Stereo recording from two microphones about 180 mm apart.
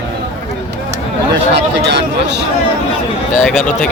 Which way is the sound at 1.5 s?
70° right (ahead or behind).